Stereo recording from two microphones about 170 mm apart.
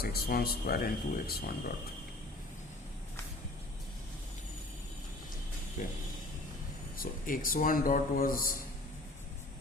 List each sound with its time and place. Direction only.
0.0 s speech: 60° left (ahead or behind)
5.8 s speech: 50° left (ahead or behind)